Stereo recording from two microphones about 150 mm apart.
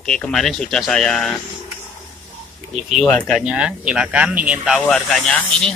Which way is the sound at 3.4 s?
5° right (ahead or behind).